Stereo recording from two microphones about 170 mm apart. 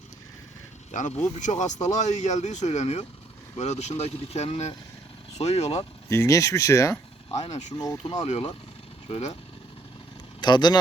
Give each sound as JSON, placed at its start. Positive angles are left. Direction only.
{"t": 0.9, "sound": "speech", "side_deg": 45}
{"t": 6.1, "sound": "speech", "side_deg": 15}
{"t": 10.4, "sound": "speech", "side_deg": 25}